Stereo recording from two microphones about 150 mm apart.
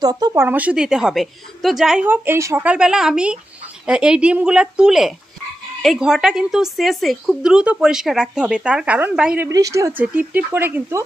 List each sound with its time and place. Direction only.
0.0 s speech: 25° right (ahead or behind)
0.5 s a woman's voice: 10° right (ahead or behind)
2.0 s a woman's voice: 15° right (ahead or behind)
9.5 s speech: 20° right (ahead or behind)